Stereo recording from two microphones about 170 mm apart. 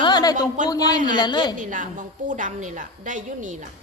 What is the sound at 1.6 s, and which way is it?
Speech, 50° right (ahead or behind).